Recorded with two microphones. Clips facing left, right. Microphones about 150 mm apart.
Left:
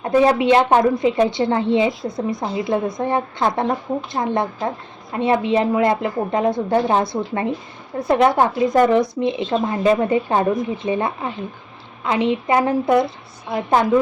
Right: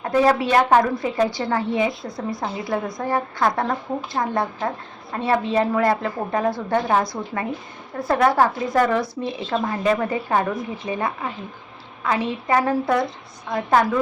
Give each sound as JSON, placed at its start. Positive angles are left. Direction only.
{"t": 0.0, "sound": "a woman's voice", "side_deg": 20}